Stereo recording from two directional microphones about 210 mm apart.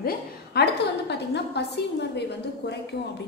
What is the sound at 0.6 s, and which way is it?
A woman's voice, 50° left (ahead or behind).